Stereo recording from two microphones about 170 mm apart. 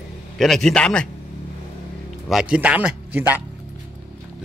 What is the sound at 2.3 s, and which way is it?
A man's voice, 5° right (ahead or behind).